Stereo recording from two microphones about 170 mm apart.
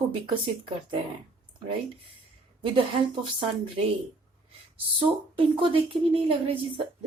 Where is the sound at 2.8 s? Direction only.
30° right (ahead or behind).